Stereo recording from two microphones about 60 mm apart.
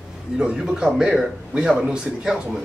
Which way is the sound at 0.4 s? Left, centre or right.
Centre.